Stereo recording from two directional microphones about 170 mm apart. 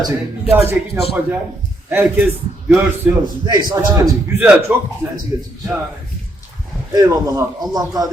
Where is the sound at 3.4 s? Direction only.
25° right (ahead or behind).